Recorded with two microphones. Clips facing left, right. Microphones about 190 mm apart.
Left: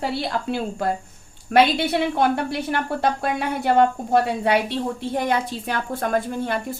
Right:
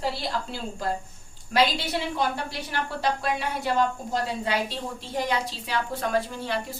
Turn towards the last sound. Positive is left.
turn(degrees=50)  # may be behind; listen again after turning